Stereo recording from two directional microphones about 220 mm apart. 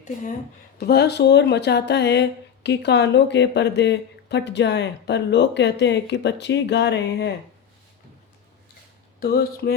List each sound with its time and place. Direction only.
0.0 s speech: 35° left (ahead or behind)
0.8 s speech: 45° left (ahead or behind)
9.2 s speech: 45° left (ahead or behind)